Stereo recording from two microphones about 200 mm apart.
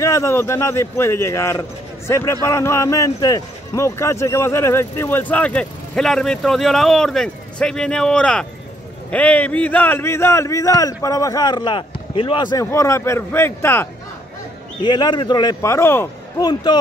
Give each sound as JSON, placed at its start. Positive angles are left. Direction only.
{"t": 0.0, "sound": "speech", "side_deg": 15}
{"t": 14.8, "sound": "a man's voice", "side_deg": 20}